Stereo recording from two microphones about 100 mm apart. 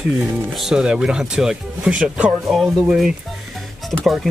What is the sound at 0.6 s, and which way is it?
Speech, 5° right (ahead or behind).